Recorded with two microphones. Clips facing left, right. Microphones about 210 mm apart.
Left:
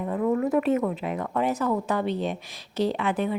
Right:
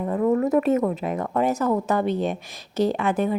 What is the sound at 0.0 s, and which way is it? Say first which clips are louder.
Speech: right 3 dB; 45° right (ahead or behind).